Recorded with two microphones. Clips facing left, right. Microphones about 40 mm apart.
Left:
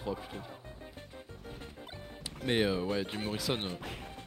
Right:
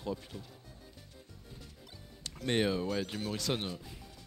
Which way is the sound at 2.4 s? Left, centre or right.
Centre.